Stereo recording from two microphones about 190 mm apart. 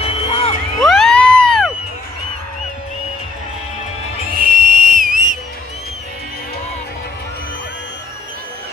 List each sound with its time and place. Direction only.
0.0 s crowd: 30° left (ahead or behind)
0.9 s a sound: centre (ahead or behind)
4.4 s whistle: 50° right (ahead or behind)